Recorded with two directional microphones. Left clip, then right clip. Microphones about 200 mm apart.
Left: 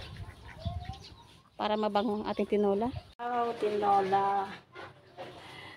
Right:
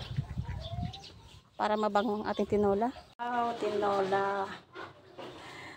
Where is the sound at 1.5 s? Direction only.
10° left (ahead or behind).